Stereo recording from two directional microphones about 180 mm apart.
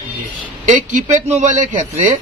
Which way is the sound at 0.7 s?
40° right (ahead or behind).